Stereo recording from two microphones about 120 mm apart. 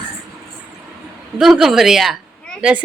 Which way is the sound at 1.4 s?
5° right (ahead or behind).